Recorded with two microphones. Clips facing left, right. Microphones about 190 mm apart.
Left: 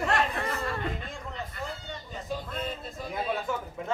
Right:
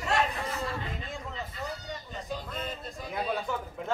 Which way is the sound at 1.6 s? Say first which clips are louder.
Even; 55° left (ahead or behind).